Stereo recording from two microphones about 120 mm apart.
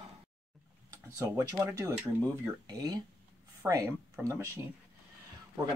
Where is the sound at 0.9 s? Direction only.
30° right (ahead or behind).